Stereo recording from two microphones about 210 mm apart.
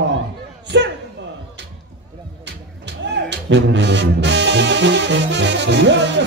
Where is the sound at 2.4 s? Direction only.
55° right (ahead or behind).